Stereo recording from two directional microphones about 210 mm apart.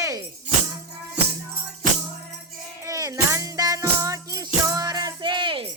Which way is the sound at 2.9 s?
15° right (ahead or behind).